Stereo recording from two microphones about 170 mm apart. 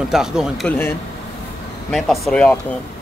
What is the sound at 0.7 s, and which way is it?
Speech, 15° left (ahead or behind).